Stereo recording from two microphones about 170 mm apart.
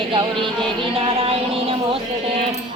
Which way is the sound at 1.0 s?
35° right (ahead or behind).